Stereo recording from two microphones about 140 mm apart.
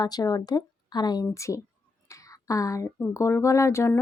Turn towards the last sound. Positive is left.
turn(degrees=20)  # may be behind; listen again after turning